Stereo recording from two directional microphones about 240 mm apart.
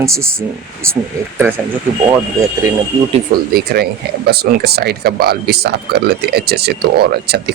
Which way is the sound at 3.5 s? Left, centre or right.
Right.